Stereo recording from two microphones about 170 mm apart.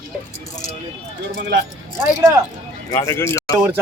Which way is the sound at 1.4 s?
90° right.